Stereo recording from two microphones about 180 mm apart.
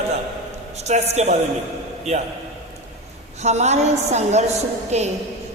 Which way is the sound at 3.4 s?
40° right (ahead or behind).